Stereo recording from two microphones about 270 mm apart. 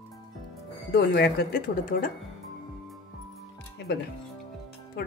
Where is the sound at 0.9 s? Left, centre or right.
Left.